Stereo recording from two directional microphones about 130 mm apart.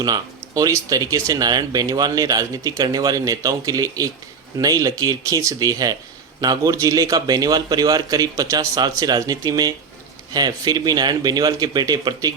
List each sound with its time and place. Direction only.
0.0 s speech: 30° right (ahead or behind)